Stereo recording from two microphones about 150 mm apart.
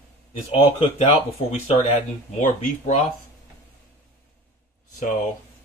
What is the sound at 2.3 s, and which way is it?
Speech, 55° left (ahead or behind).